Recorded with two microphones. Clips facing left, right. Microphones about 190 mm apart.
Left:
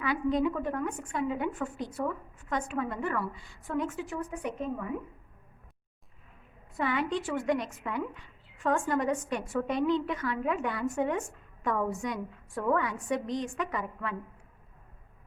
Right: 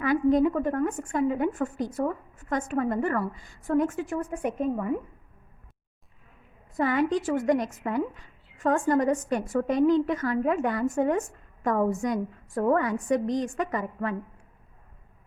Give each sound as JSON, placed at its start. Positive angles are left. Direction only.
{"t": 0.0, "sound": "a woman's voice", "side_deg": -45}
{"t": 6.7, "sound": "a woman's voice", "side_deg": -40}